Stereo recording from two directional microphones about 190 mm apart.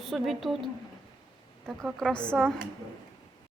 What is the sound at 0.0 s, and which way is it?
Speech, centre (ahead or behind).